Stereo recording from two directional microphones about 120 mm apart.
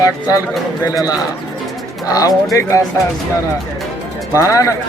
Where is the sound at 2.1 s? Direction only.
30° left (ahead or behind).